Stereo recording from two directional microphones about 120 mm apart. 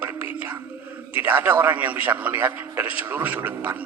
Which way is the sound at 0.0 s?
15° right (ahead or behind).